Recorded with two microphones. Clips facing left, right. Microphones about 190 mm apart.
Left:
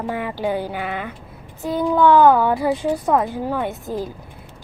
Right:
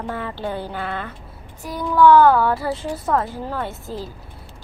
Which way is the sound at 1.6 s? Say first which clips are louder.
Even; 20° left (ahead or behind).